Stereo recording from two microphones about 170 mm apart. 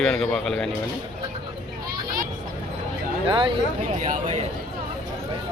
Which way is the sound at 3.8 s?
45° right (ahead or behind).